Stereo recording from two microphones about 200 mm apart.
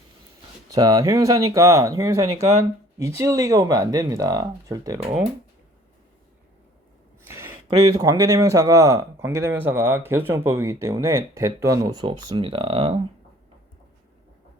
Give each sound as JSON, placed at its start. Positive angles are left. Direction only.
{"t": 0.7, "sound": "speech", "side_deg": -20}
{"t": 7.3, "sound": "speech", "side_deg": -15}